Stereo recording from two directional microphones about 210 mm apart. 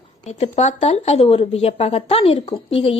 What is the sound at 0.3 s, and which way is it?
Speech, 30° left (ahead or behind).